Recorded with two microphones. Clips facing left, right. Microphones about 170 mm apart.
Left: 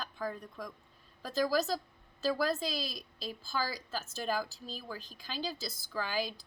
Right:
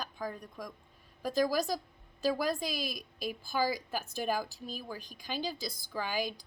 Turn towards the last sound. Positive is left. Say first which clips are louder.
# right 1 dB
turn(degrees=-15)  # may be behind; listen again after turning